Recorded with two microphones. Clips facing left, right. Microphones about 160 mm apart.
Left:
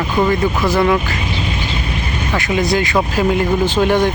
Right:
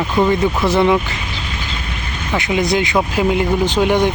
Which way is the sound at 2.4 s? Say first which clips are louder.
Even; 20° right (ahead or behind).